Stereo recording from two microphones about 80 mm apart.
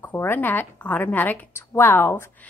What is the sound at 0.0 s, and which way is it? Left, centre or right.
A woman's voice, left.